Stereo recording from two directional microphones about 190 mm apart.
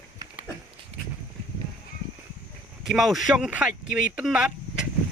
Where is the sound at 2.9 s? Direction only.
Centre (ahead or behind).